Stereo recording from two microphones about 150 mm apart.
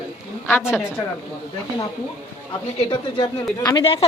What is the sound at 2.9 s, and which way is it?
Speech, 30° left (ahead or behind).